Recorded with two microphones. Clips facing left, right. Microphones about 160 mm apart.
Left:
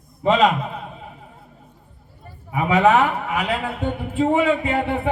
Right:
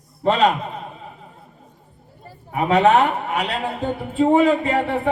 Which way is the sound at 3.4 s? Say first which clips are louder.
Even; 35° right (ahead or behind).